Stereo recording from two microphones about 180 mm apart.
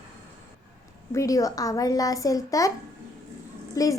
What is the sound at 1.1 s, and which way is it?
A woman's voice, 20° left (ahead or behind).